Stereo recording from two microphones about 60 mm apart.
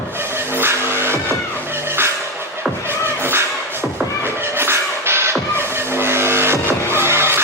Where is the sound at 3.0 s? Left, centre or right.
Right.